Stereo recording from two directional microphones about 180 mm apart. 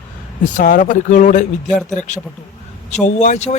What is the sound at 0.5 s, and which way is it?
Speech, 45° left (ahead or behind).